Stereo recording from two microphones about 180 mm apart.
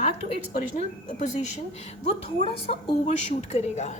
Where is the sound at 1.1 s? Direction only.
40° left (ahead or behind).